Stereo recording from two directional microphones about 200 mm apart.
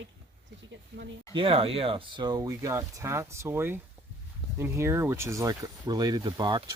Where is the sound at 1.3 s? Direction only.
30° right (ahead or behind).